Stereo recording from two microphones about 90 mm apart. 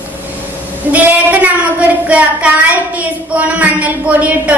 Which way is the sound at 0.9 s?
15° right (ahead or behind).